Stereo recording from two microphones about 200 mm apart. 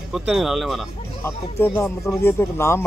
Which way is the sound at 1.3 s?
15° left (ahead or behind).